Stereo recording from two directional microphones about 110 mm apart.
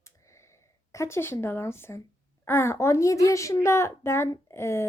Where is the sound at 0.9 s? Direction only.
25° left (ahead or behind).